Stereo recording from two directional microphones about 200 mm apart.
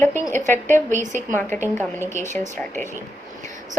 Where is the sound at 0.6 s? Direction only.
40° right (ahead or behind).